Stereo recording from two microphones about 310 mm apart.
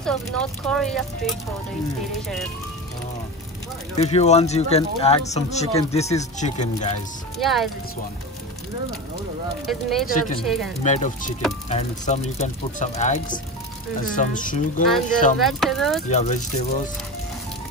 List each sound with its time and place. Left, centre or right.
0.0 s speech: centre
4.0 s speech: left
7.3 s speech: centre
9.7 s speech: centre
10.0 s speech: left
10.4 s speech: centre
10.8 s speech: left
15.4 s speech: centre
16.1 s speech: left